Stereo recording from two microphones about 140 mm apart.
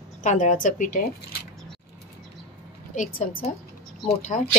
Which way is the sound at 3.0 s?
65° left (ahead or behind).